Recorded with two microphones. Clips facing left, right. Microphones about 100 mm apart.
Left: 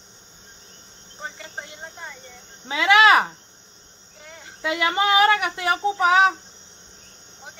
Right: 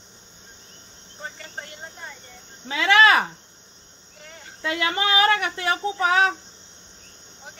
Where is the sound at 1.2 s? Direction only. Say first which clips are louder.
Left 1 dB; 10° left (ahead or behind).